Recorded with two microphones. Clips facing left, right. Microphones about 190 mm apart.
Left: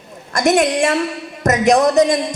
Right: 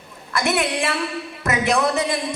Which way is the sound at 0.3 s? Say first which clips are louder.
Left 7 dB; 40° left (ahead or behind).